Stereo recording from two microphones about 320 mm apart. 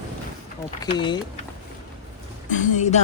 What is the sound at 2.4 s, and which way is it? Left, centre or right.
Speech, left.